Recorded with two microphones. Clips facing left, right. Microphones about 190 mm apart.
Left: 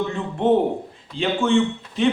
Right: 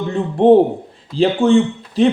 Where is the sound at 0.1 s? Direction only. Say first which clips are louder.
Right 11 dB; 35° right (ahead or behind).